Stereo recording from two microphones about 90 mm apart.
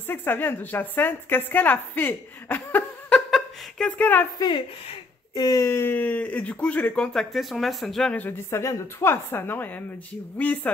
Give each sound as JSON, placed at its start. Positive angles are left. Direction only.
{"t": 0.1, "sound": "a woman's voice", "side_deg": 20}
{"t": 3.3, "sound": "a sound", "side_deg": 5}
{"t": 4.0, "sound": "a woman's voice", "side_deg": 20}
{"t": 4.4, "sound": "a woman's voice", "side_deg": 55}
{"t": 5.3, "sound": "speech", "side_deg": 45}
{"t": 5.7, "sound": "speech", "side_deg": 25}
{"t": 7.1, "sound": "speech", "side_deg": 0}
{"t": 8.1, "sound": "a woman's voice", "side_deg": 20}
{"t": 8.5, "sound": "a woman's voice", "side_deg": 35}